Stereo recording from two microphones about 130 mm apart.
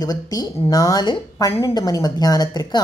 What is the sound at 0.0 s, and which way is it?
A woman's voice, 30° left (ahead or behind).